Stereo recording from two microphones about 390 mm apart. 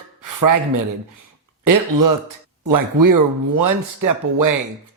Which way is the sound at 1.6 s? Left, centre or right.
Right.